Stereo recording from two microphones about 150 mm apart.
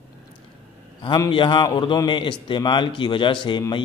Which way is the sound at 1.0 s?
30° left (ahead or behind).